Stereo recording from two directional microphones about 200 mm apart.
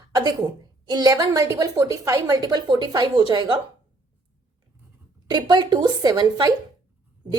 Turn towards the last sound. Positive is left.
turn(degrees=-20)  # may be behind; listen again after turning